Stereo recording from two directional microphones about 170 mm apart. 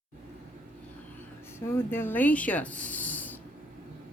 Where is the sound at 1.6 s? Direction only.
15° left (ahead or behind).